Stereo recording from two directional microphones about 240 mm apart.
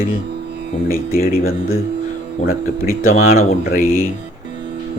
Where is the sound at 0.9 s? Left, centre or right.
Left.